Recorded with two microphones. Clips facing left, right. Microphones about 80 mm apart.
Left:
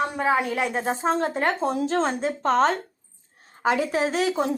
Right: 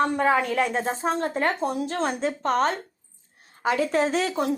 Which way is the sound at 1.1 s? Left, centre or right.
Left.